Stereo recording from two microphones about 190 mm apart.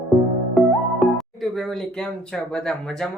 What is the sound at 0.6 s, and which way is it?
Speech, centre (ahead or behind).